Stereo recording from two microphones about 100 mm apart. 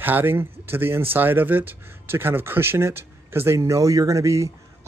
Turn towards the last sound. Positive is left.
turn(degrees=-30)  # may be behind; listen again after turning